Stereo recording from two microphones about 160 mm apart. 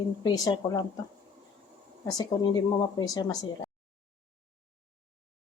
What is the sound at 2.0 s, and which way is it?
Speech, 25° left (ahead or behind).